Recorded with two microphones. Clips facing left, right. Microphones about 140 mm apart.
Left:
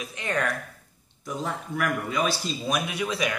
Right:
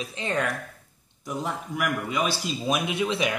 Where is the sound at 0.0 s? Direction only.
25° right (ahead or behind).